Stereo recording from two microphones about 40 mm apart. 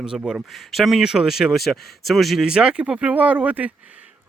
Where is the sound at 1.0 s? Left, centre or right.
Centre.